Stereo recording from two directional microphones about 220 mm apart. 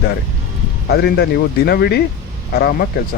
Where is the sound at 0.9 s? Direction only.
45° left (ahead or behind).